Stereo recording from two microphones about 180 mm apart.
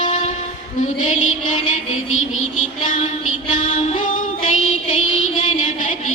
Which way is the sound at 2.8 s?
45° left (ahead or behind).